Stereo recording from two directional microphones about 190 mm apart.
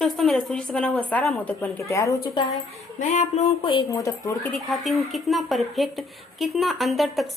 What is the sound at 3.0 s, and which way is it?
Speech, 35° left (ahead or behind).